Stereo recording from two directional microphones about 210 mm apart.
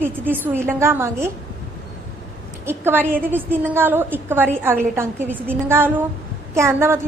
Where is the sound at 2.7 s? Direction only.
10° right (ahead or behind).